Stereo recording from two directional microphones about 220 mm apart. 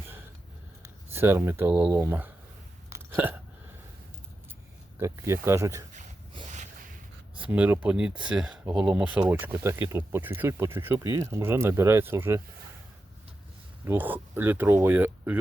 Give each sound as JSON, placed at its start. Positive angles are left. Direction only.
{"t": 1.1, "sound": "speech", "side_deg": -10}
{"t": 2.9, "sound": "hiccup", "side_deg": -10}
{"t": 4.9, "sound": "speech", "side_deg": -10}
{"t": 6.3, "sound": "a sound", "side_deg": -35}
{"t": 7.3, "sound": "speech", "side_deg": -5}
{"t": 13.8, "sound": "speech", "side_deg": -10}